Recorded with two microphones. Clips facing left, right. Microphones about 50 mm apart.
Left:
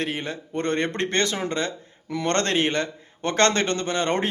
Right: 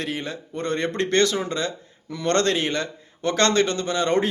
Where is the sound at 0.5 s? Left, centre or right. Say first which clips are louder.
Left 1 dB; left.